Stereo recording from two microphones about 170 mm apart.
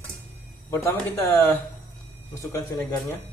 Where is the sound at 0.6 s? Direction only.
15° left (ahead or behind).